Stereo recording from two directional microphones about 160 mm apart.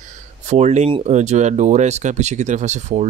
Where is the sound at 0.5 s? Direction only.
45° right (ahead or behind).